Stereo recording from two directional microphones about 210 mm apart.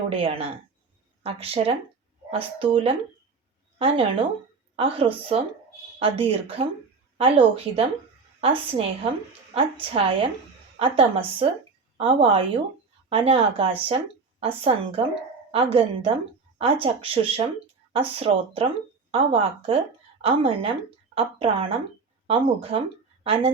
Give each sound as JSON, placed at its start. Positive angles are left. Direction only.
{"t": 0.1, "sound": "a woman's voice", "side_deg": -25}